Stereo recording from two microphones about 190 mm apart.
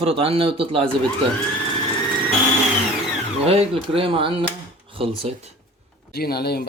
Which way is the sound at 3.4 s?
30° right (ahead or behind).